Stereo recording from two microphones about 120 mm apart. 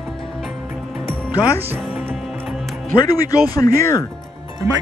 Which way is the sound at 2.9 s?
30° left (ahead or behind).